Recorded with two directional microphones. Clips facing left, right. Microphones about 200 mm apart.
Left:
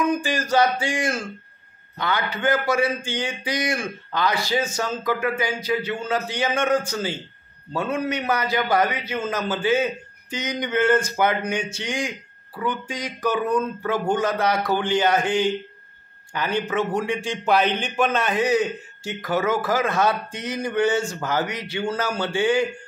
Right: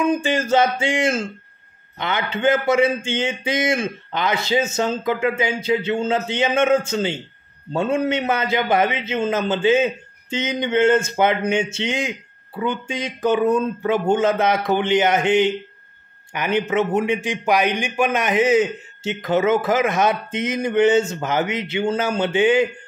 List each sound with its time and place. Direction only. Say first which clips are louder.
0.0 s a man's voice: right 3 dB; 25° right (ahead or behind)